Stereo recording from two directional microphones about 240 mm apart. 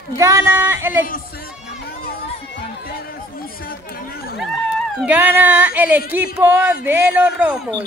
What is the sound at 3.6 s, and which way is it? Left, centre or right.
Speech, left.